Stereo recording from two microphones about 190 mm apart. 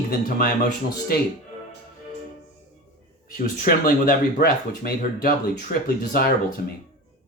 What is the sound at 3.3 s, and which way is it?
Speech, 45° left (ahead or behind).